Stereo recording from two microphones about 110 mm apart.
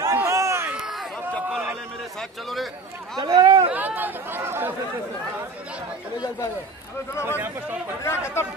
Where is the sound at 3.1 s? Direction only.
40° right (ahead or behind).